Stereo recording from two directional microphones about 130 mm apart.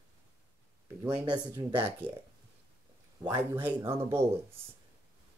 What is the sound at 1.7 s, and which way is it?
Speech, 15° right (ahead or behind).